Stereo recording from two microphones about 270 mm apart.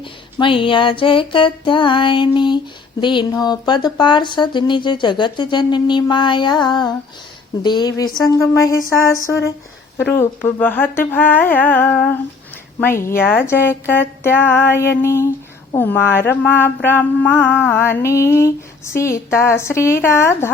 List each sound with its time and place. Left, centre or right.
0.0 s speech: centre
10.1 s speech: centre